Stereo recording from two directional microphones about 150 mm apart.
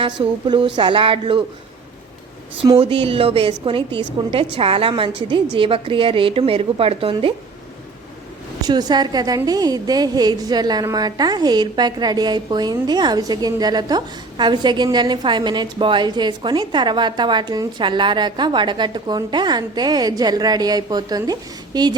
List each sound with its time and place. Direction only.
0.0 s a woman's voice: 35° right (ahead or behind)
2.7 s a woman's voice: 35° right (ahead or behind)
8.6 s a woman's voice: 25° right (ahead or behind)